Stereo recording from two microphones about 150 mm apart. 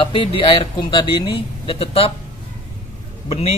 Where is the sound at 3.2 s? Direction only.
40° left (ahead or behind).